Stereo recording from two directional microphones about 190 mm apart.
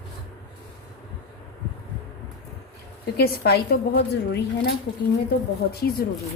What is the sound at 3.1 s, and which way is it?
A woman's voice, 55° left (ahead or behind).